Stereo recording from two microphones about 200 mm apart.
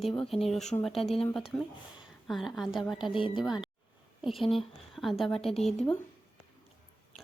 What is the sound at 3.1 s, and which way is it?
Speech, 25° left (ahead or behind).